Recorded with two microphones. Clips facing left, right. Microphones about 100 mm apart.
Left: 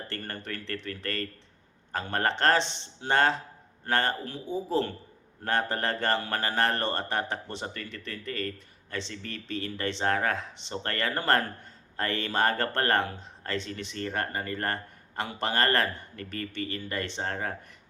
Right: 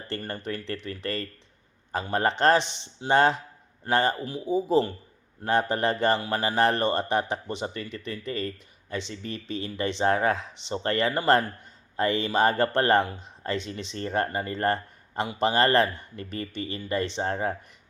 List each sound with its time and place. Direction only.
0.1 s a man's voice: 15° right (ahead or behind)